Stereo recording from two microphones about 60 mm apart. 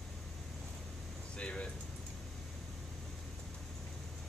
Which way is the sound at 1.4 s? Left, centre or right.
Centre.